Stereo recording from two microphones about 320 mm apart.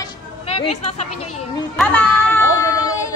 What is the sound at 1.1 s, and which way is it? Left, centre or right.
Speech, left.